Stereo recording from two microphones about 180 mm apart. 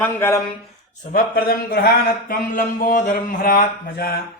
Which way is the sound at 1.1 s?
55° left (ahead or behind).